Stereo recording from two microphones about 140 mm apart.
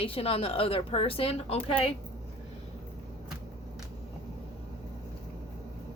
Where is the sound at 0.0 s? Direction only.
45° left (ahead or behind).